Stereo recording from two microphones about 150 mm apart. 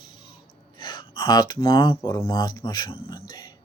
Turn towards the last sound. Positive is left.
turn(degrees=35)  # may be behind; listen again after turning